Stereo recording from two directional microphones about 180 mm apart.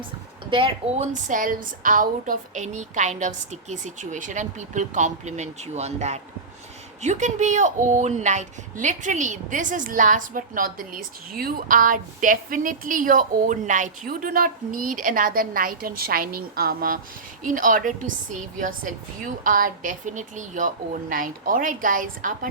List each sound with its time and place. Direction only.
0.5 s speech: 30° right (ahead or behind)
1.1 s a woman's voice: 45° right (ahead or behind)